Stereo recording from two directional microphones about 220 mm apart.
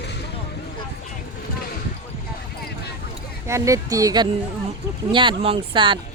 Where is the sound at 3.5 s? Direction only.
15° right (ahead or behind).